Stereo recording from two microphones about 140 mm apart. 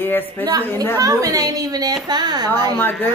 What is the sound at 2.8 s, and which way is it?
Music, 15° left (ahead or behind).